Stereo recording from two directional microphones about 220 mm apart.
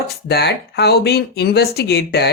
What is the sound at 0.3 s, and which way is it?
Speech, 50° left (ahead or behind).